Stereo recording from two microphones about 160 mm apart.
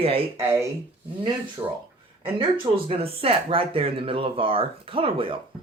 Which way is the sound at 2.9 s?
35° right (ahead or behind).